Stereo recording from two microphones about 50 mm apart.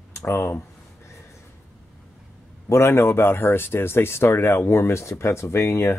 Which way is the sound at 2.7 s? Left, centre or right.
Left.